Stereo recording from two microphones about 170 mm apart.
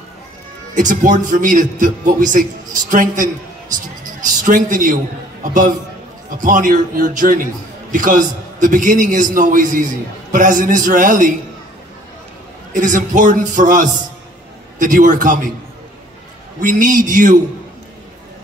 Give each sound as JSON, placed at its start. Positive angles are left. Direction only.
{"t": 0.7, "sound": "a man's voice", "side_deg": -50}
{"t": 4.4, "sound": "a man's voice", "side_deg": -50}
{"t": 12.7, "sound": "a man's voice", "side_deg": -50}
{"t": 16.6, "sound": "a man's voice", "side_deg": -50}